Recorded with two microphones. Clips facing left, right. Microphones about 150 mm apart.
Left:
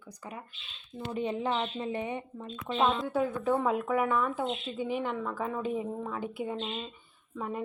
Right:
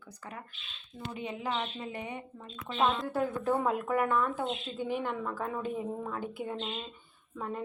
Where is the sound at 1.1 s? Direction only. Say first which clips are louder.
Left 5 dB; 30° left (ahead or behind).